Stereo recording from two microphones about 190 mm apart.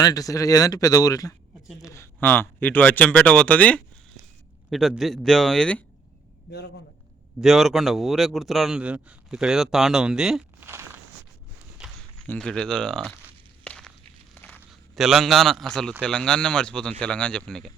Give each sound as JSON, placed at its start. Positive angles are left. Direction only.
{"t": 0.0, "sound": "speech", "side_deg": 20}
{"t": 7.4, "sound": "speech", "side_deg": 0}
{"t": 10.7, "sound": "a sound", "side_deg": -15}
{"t": 12.3, "sound": "speech", "side_deg": 5}
{"t": 13.7, "sound": "walk", "side_deg": 5}
{"t": 14.3, "sound": "a sound", "side_deg": 10}
{"t": 14.7, "sound": "speech", "side_deg": 0}